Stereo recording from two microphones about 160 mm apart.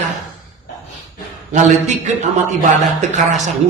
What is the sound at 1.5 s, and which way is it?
A man's voice, 45° right (ahead or behind).